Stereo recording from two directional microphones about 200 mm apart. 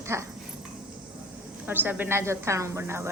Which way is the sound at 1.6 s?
10° right (ahead or behind).